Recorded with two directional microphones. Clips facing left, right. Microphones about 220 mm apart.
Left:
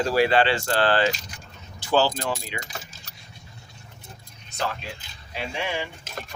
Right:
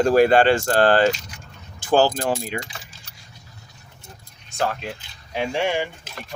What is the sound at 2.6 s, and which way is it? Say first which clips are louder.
Keys jangling: left 3 dB; 45° left (ahead or behind).